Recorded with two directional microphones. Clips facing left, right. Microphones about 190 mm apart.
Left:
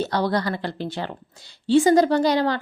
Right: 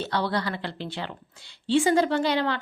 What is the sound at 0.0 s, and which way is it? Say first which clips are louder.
A woman's voice: left 4 dB; 40° left (ahead or behind).